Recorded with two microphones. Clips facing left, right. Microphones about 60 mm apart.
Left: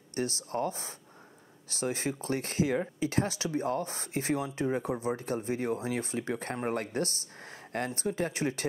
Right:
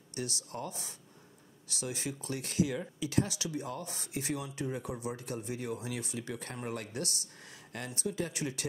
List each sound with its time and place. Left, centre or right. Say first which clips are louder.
0.1 s speech: left 7 dB; left